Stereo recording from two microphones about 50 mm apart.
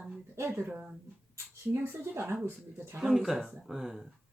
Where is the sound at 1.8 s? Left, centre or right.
Right.